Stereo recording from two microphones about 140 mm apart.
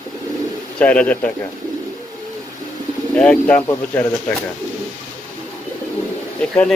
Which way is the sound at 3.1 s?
10° left (ahead or behind).